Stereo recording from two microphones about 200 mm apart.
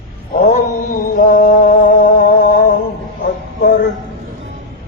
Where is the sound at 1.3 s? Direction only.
40° left (ahead or behind).